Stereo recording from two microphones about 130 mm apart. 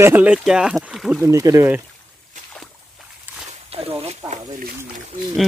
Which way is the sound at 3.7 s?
50° right (ahead or behind).